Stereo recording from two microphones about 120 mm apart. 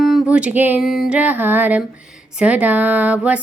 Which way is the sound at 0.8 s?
Centre (ahead or behind).